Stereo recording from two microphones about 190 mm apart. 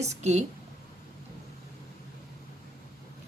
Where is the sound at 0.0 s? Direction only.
35° right (ahead or behind).